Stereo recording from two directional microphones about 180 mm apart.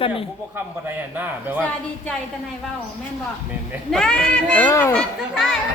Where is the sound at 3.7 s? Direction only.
Centre (ahead or behind).